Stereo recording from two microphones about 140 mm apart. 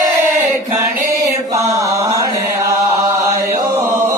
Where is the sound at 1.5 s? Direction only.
25° right (ahead or behind).